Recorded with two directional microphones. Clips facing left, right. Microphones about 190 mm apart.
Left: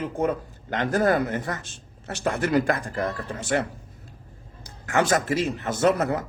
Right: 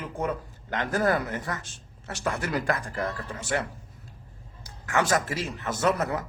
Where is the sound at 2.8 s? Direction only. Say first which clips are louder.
Left 3 dB; 40° left (ahead or behind).